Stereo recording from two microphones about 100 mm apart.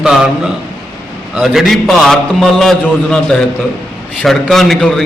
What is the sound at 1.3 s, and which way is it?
A man's voice, 5° right (ahead or behind).